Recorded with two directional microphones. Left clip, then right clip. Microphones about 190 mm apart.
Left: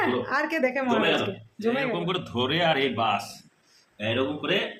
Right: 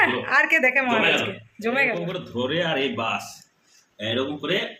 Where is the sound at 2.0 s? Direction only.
55° left (ahead or behind).